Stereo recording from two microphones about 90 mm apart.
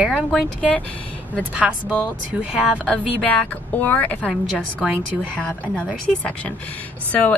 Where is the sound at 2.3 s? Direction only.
15° right (ahead or behind).